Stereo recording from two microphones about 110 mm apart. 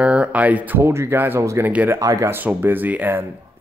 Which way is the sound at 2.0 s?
30° right (ahead or behind).